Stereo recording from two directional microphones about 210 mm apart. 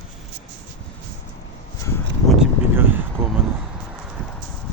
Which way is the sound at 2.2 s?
5° right (ahead or behind).